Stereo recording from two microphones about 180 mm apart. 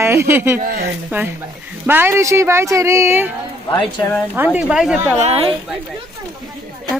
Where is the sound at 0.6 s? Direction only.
55° right (ahead or behind).